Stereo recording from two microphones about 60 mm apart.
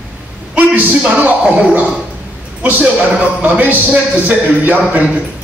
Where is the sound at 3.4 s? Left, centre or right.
Right.